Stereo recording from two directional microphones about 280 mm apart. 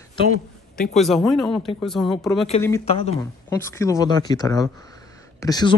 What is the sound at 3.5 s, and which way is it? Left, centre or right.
Speech, centre.